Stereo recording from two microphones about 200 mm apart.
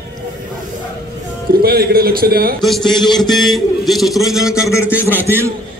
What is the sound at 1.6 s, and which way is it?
Speech, 50° right (ahead or behind).